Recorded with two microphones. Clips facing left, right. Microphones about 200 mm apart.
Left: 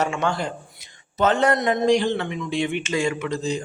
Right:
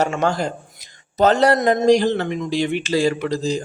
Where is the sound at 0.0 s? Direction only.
40° right (ahead or behind).